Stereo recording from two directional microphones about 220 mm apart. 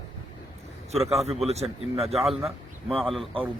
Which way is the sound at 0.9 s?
30° right (ahead or behind).